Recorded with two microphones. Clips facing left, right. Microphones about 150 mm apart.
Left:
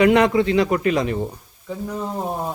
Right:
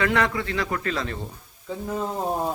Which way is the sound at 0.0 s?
20° left (ahead or behind).